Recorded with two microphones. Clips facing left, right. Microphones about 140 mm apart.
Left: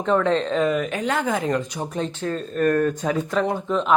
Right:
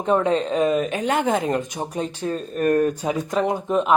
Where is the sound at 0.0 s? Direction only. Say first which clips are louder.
Even; 15° right (ahead or behind).